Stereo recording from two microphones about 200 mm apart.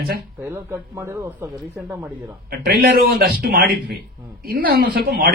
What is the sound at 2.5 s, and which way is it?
Speech, 50° right (ahead or behind).